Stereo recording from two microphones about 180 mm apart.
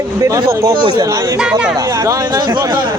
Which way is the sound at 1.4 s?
5° right (ahead or behind).